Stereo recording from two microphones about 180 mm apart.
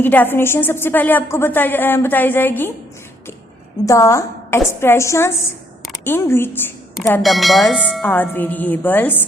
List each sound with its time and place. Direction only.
0.0 s a woman's voice: 10° left (ahead or behind)
3.8 s a woman's voice: 15° left (ahead or behind)
7.2 s speech: centre (ahead or behind)
8.0 s a woman's voice: 10° left (ahead or behind)